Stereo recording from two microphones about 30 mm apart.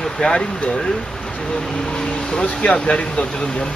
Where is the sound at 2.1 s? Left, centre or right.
Left.